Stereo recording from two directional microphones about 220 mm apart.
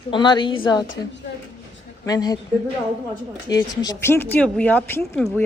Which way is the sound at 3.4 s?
15° left (ahead or behind).